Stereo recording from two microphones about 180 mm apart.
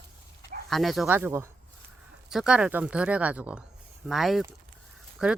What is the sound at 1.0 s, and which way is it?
Speech, 10° right (ahead or behind).